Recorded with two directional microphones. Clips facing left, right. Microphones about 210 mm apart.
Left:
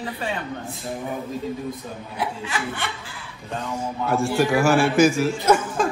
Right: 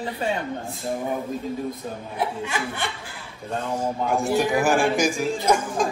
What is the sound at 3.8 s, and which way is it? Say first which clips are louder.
A man's voice: left 2 dB; 15° right (ahead or behind).